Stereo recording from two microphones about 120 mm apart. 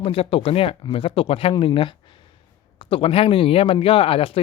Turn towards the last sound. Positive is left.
turn(degrees=50)  # may be behind; listen again after turning